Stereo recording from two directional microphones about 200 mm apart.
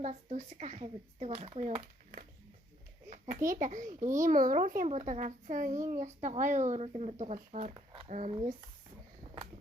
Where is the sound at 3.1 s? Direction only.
40° right (ahead or behind).